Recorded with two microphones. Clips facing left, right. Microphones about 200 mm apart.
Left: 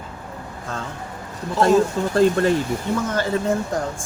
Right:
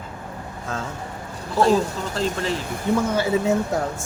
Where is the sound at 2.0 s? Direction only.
50° left (ahead or behind).